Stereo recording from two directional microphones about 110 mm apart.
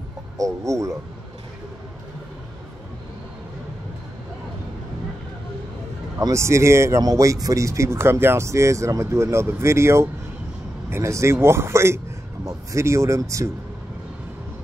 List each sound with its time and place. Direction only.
0.4 s speech: 30° right (ahead or behind)
6.1 s speech: 25° right (ahead or behind)